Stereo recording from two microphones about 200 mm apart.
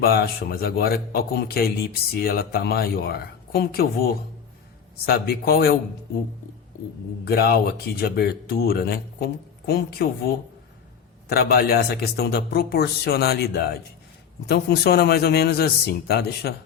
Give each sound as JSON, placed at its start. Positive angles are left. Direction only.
{"t": 0.0, "sound": "a man's voice", "side_deg": 50}
{"t": 7.3, "sound": "a man's voice", "side_deg": 50}